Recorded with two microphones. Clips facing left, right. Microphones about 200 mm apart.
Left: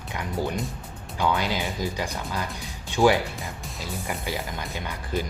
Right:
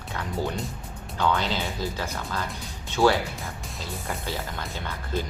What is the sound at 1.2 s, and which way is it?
Speech, 10° left (ahead or behind).